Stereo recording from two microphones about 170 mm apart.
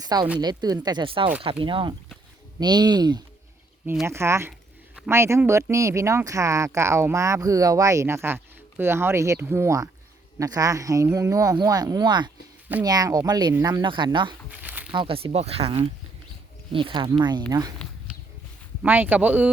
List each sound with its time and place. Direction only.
0.3 s speech: 25° right (ahead or behind)
14.6 s a sound: 10° right (ahead or behind)
14.9 s speech: 30° right (ahead or behind)
18.8 s speech: 10° right (ahead or behind)